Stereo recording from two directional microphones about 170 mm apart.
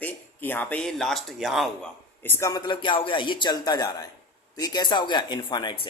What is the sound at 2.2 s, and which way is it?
A man's voice, 15° left (ahead or behind).